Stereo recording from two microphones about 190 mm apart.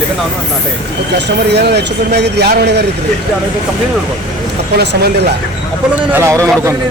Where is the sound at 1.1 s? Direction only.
60° right (ahead or behind).